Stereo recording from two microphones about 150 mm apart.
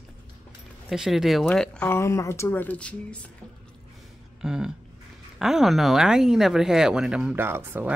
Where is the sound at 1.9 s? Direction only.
20° left (ahead or behind).